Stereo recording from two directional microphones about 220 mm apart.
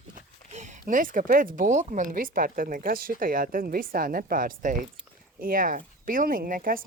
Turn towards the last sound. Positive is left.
turn(degrees=-40)  # may be behind; listen again after turning